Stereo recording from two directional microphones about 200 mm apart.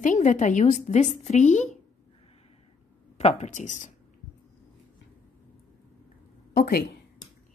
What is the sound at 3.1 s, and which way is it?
Speech, 35° left (ahead or behind).